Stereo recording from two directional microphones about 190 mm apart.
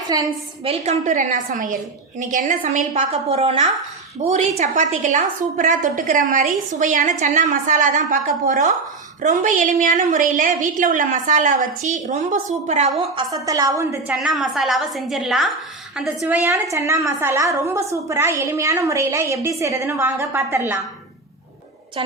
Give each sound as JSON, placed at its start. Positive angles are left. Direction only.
{"t": 0.1, "sound": "a woman's voice", "side_deg": -25}
{"t": 1.0, "sound": "a woman's voice", "side_deg": -45}
{"t": 13.3, "sound": "a woman's voice", "side_deg": -20}
{"t": 14.1, "sound": "a woman's voice", "side_deg": -5}
{"t": 16.7, "sound": "a woman's voice", "side_deg": -15}